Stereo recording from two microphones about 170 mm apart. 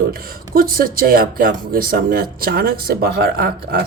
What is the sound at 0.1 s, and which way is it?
Speech, 60° right (ahead or behind).